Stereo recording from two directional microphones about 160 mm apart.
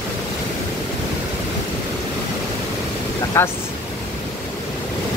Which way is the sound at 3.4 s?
15° left (ahead or behind).